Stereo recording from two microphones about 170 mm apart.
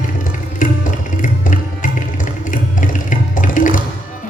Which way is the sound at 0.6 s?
50° left (ahead or behind).